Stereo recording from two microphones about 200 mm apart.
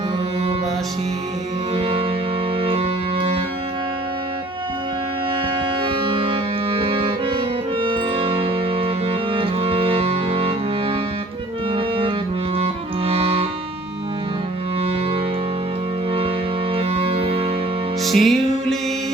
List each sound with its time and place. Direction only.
1.7 s music: 30° right (ahead or behind)
5.8 s music: 25° right (ahead or behind)
16.7 s music: 30° right (ahead or behind)
18.0 s music: centre (ahead or behind)